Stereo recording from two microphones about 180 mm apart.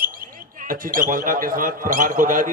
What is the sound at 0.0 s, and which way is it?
A man's voice, 55° right (ahead or behind).